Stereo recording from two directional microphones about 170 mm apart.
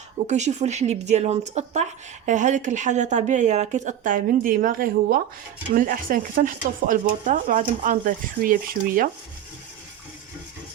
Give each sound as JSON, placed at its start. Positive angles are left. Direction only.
{"t": 0.3, "sound": "speech", "side_deg": -45}